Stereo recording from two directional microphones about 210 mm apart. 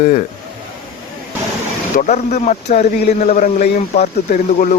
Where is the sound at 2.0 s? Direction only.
40° left (ahead or behind).